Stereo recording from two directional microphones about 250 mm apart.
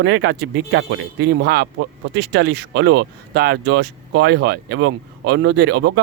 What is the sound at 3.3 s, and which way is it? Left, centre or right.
Speech, right.